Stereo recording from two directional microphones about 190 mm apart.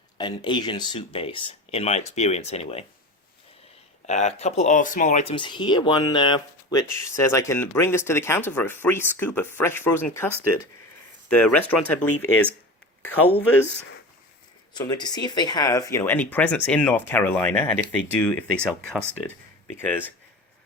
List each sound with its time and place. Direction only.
0.2 s speech: 25° left (ahead or behind)
4.0 s speech: 35° left (ahead or behind)
5.3 s speech: 25° left (ahead or behind); by 12.5 s 5° left (ahead or behind)
14.7 s speech: 20° left (ahead or behind)